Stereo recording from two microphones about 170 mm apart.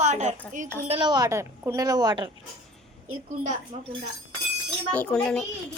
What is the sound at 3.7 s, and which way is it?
Speech, 35° right (ahead or behind).